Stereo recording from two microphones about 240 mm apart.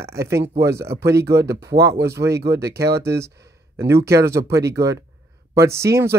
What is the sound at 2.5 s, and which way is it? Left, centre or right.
Speech, right.